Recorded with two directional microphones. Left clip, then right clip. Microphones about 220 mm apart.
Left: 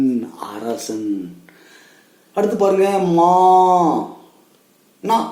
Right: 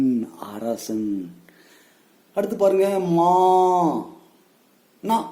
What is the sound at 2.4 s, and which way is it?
Speech, 50° right (ahead or behind).